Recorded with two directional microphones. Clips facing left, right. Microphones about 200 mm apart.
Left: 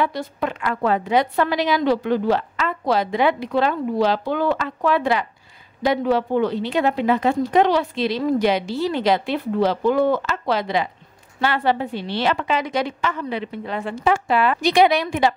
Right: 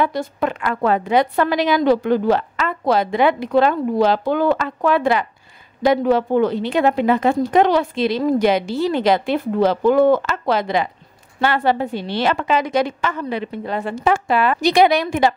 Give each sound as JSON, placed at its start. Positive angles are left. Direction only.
{"t": 0.0, "sound": "speech", "side_deg": -50}